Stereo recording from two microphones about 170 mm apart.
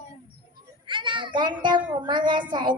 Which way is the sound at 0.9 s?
30° right (ahead or behind).